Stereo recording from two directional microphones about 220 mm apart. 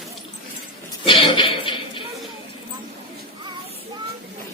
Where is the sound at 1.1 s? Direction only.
25° left (ahead or behind).